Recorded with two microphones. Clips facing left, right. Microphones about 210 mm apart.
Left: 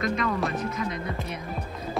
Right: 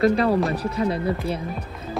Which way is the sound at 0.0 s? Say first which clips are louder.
Right 8 dB; 35° right (ahead or behind).